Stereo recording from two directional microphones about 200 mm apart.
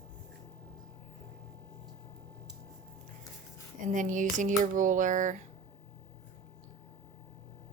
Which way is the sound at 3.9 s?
40° right (ahead or behind).